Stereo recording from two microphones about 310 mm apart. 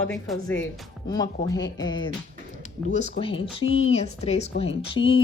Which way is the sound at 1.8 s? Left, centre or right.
Centre.